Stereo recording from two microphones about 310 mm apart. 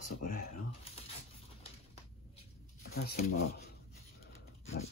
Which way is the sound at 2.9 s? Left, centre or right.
Left.